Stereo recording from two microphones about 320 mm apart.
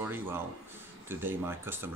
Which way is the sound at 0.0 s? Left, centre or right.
Centre.